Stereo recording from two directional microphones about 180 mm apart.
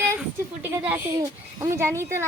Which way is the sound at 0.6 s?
10° right (ahead or behind).